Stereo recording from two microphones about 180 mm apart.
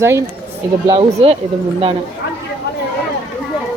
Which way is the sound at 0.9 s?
30° right (ahead or behind).